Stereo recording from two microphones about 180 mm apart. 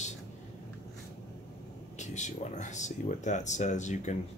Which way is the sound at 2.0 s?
40° left (ahead or behind).